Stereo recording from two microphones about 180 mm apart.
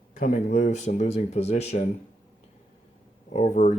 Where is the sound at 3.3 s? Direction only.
40° left (ahead or behind).